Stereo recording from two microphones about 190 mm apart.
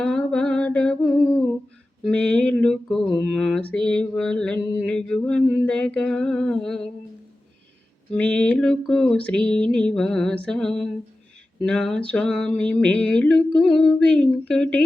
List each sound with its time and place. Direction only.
0.0 s a sound: 5° left (ahead or behind)
2.0 s mantra: 5° left (ahead or behind)
8.1 s mantra: 5° left (ahead or behind)